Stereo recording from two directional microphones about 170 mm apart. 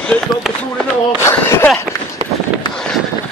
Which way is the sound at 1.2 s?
15° left (ahead or behind).